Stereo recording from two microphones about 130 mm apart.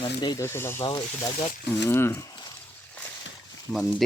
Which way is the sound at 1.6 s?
20° left (ahead or behind).